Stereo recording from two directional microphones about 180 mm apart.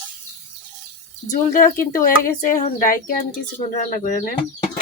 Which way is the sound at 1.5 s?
50° left (ahead or behind).